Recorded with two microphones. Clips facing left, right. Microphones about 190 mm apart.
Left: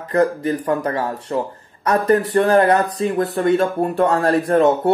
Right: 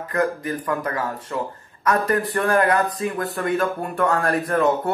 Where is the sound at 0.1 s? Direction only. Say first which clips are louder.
Left 6 dB; 30° left (ahead or behind).